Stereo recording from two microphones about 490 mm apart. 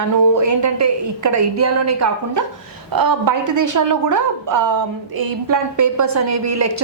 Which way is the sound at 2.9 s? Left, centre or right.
Right.